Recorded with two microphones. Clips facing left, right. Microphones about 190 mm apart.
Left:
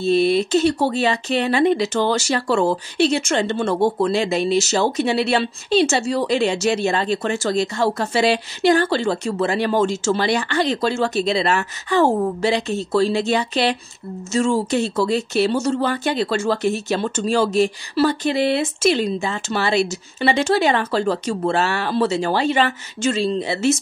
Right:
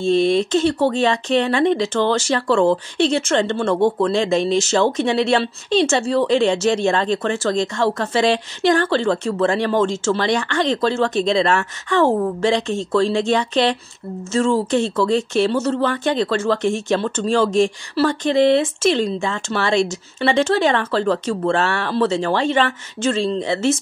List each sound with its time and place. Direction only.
0.0 s speech: 5° left (ahead or behind)